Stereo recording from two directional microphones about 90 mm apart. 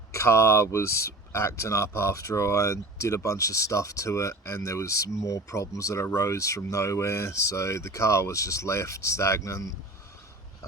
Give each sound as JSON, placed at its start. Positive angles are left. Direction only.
{"t": 0.1, "sound": "speech", "side_deg": 30}